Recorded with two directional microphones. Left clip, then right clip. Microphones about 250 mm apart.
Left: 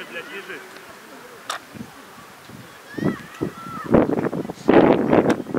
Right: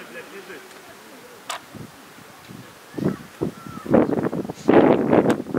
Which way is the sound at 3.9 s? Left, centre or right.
Centre.